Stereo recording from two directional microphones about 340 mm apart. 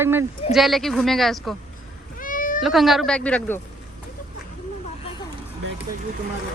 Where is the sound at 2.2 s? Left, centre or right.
Left.